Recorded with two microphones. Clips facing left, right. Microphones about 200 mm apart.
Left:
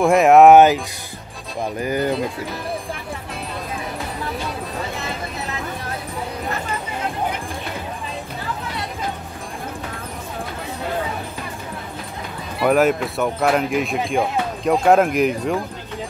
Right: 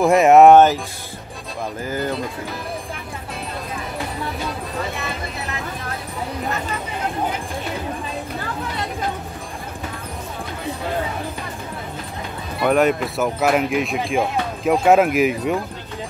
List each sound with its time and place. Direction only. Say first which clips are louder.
0.0 s speech: even; centre (ahead or behind)
1.8 s speech: left 4 dB; 15° left (ahead or behind)
12.6 s speech: left 1 dB; centre (ahead or behind)